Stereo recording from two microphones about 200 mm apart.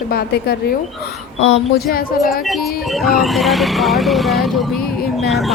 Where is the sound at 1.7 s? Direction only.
50° left (ahead or behind).